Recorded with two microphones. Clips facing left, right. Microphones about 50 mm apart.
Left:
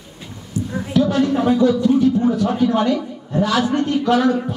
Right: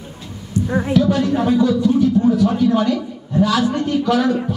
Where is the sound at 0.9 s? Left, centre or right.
Centre.